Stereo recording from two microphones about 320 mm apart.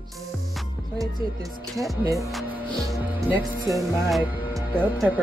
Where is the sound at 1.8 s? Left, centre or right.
Centre.